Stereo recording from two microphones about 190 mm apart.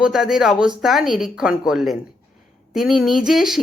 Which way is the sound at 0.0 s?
Centre (ahead or behind).